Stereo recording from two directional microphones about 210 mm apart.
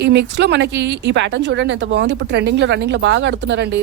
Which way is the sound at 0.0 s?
55° right (ahead or behind).